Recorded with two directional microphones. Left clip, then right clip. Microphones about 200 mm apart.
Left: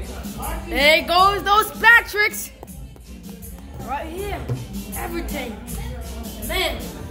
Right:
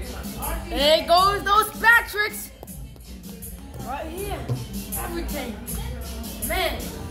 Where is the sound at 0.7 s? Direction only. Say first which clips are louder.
Left 2 dB; 35° left (ahead or behind); by 2.3 s 50° left (ahead or behind).